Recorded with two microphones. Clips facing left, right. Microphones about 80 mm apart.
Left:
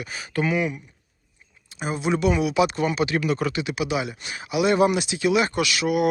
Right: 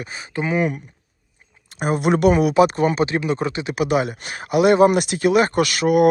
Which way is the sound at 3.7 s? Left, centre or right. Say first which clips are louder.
Right 6 dB; right.